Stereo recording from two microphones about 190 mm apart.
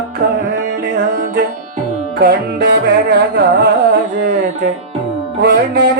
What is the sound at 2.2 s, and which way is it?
Music, 60° right (ahead or behind).